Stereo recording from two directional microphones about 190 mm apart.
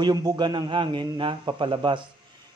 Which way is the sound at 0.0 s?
20° right (ahead or behind).